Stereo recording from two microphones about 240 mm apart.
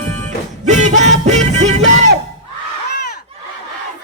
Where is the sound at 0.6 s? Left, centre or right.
Right.